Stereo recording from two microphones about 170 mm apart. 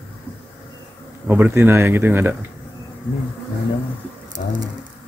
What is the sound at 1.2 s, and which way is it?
Speech, 10° right (ahead or behind).